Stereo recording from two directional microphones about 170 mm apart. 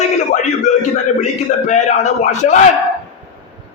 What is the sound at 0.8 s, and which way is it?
A man's voice, 45° left (ahead or behind).